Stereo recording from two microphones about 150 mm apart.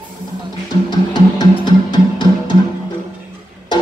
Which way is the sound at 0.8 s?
30° left (ahead or behind).